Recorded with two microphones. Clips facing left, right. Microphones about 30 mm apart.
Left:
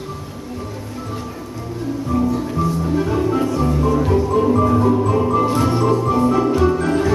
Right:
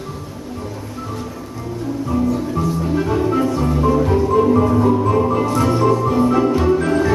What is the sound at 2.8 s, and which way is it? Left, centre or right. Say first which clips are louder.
Music: right 1 dB; centre.